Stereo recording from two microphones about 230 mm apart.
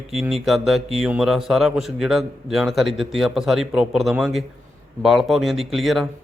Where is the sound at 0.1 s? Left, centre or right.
Centre.